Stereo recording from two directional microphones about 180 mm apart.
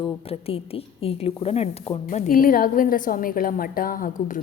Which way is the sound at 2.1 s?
45° left (ahead or behind).